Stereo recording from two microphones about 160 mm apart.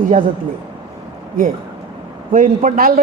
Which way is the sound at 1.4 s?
65° right (ahead or behind).